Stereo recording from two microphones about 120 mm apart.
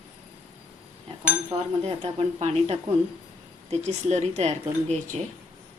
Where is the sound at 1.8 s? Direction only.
55° right (ahead or behind).